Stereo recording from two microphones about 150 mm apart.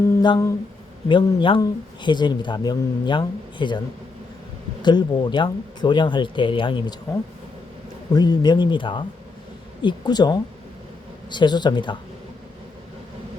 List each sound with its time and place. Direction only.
0.2 s speech: 25° left (ahead or behind)
4.8 s speech: 30° left (ahead or behind)
8.1 s speech: 25° left (ahead or behind)